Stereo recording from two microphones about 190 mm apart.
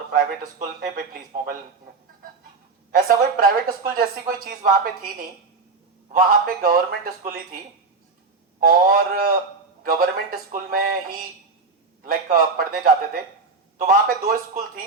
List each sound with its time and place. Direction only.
0.1 s a woman's voice: 50° right (ahead or behind)
2.9 s a woman's voice: 50° right (ahead or behind)
6.1 s a woman's voice: 45° right (ahead or behind)
8.6 s a woman's voice: 50° right (ahead or behind)